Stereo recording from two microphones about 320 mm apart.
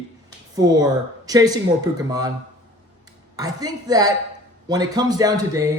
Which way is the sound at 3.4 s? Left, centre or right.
Centre.